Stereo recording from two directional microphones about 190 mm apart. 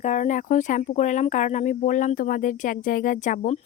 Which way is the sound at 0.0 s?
40° left (ahead or behind).